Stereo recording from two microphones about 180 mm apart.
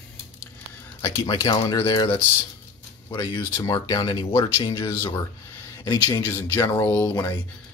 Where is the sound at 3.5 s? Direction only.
20° left (ahead or behind).